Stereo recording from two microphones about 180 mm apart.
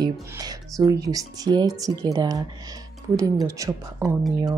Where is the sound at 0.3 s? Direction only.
20° right (ahead or behind).